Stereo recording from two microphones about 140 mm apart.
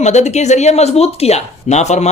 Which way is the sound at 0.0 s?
55° left (ahead or behind).